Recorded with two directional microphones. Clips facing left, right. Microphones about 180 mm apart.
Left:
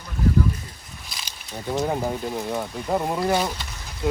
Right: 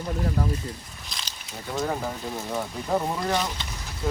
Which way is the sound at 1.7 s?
20° left (ahead or behind).